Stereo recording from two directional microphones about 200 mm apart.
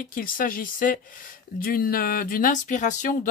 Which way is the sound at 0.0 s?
45° left (ahead or behind).